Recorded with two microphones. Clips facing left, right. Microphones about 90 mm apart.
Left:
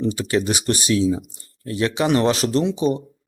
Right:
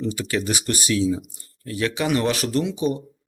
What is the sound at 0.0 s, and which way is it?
Speech, 20° left (ahead or behind).